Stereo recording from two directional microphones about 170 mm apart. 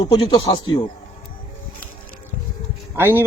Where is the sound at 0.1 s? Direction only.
30° left (ahead or behind).